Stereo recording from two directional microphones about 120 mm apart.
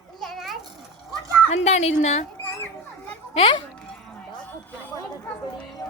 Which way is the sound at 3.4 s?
50° left (ahead or behind).